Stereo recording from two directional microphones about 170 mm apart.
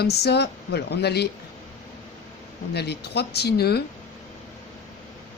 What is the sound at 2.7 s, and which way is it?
Speech, 75° left (ahead or behind).